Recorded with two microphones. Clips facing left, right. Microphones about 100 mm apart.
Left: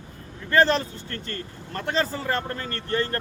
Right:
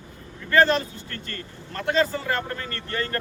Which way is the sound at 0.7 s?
35° left (ahead or behind).